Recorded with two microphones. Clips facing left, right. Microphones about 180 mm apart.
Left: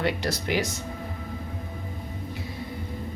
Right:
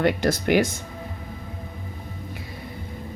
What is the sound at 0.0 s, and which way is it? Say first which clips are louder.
Speech: right 6 dB; 50° right (ahead or behind).